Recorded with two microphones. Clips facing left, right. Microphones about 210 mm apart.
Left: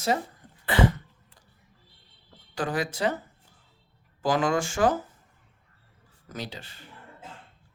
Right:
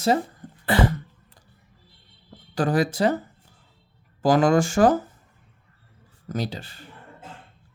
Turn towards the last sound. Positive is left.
turn(degrees=-35)  # may be behind; listen again after turning